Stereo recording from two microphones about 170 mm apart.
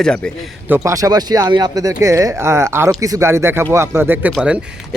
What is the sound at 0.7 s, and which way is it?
Speech, 15° right (ahead or behind).